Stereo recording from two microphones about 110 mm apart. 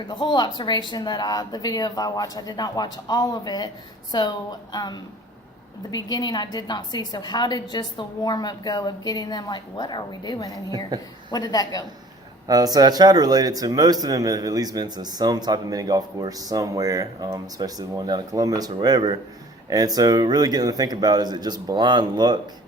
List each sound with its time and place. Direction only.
0.1 s a woman's voice: 40° left (ahead or behind)
12.5 s speech: 35° right (ahead or behind)